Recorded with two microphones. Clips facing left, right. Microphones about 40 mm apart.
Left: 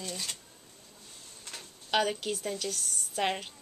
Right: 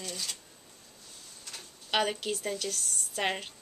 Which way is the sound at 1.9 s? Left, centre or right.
Centre.